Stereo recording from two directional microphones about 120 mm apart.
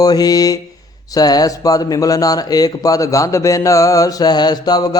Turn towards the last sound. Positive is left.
turn(degrees=35)  # may be behind; listen again after turning